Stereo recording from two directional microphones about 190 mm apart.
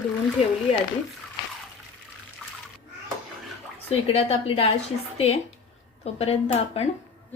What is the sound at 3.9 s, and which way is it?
Speech, 30° left (ahead or behind).